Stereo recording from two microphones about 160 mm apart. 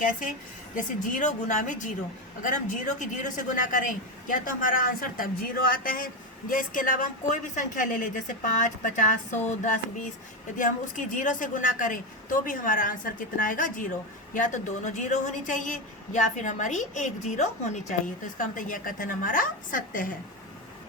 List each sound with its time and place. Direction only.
0.0 s a woman's voice: 55° left (ahead or behind)